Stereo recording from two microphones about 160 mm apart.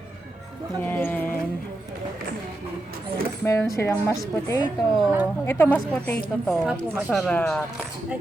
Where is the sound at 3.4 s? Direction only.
20° left (ahead or behind).